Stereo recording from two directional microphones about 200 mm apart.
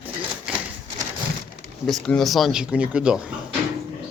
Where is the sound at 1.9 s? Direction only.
Centre (ahead or behind).